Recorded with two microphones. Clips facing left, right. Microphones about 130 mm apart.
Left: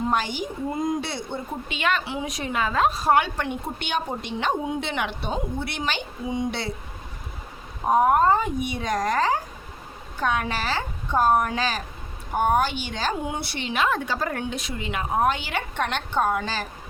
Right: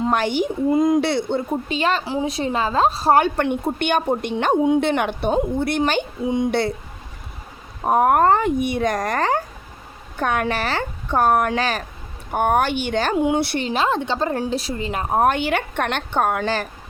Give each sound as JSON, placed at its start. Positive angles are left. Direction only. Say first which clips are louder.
{"t": 0.0, "sound": "a woman's voice", "louder": "right 6 dB", "side_deg": -60}
{"t": 1.6, "sound": "a woman's voice", "louder": "right 4 dB", "side_deg": -35}
{"t": 3.2, "sound": "speech", "louder": "right 6 dB", "side_deg": -55}
{"t": 7.9, "sound": "speech", "louder": "right 3 dB", "side_deg": -55}
{"t": 13.6, "sound": "a woman's voice", "louder": "right 4 dB", "side_deg": -35}
{"t": 15.2, "sound": "speech", "louder": "right 6 dB", "side_deg": -55}